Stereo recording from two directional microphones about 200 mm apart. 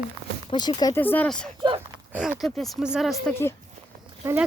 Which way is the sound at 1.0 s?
10° left (ahead or behind).